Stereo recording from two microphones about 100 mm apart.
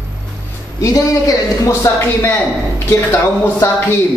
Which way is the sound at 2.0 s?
25° left (ahead or behind).